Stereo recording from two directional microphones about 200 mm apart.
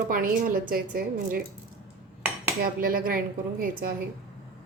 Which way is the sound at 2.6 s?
45° right (ahead or behind).